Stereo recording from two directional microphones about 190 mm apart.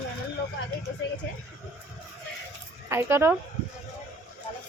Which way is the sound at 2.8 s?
15° right (ahead or behind).